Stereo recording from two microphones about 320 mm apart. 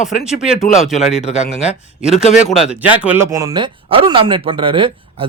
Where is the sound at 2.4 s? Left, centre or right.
Centre.